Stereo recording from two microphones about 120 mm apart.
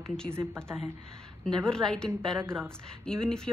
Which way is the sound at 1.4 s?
5° left (ahead or behind).